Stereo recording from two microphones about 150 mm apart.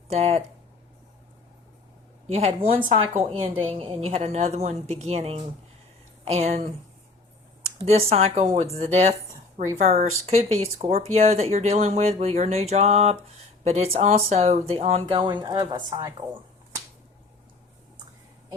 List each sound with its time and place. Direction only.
0.1 s speech: 45° right (ahead or behind)
2.3 s a woman's voice: 40° right (ahead or behind)
7.8 s speech: 40° right (ahead or behind)
15.0 s a woman's voice: 35° right (ahead or behind)